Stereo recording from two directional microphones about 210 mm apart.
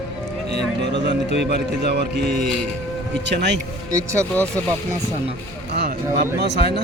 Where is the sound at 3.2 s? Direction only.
55° right (ahead or behind).